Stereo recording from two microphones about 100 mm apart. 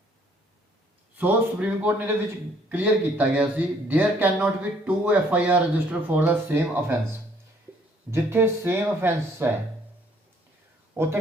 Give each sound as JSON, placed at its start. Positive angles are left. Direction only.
{"t": 1.2, "sound": "speech", "side_deg": -15}
{"t": 8.1, "sound": "speech", "side_deg": -25}
{"t": 10.9, "sound": "speech", "side_deg": -25}